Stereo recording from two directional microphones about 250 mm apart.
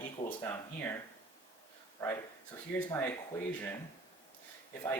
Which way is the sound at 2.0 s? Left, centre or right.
Centre.